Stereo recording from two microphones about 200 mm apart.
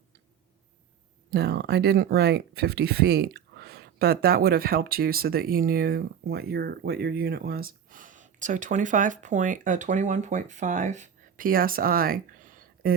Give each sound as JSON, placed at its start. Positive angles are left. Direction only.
{"t": 1.3, "sound": "speech", "side_deg": -55}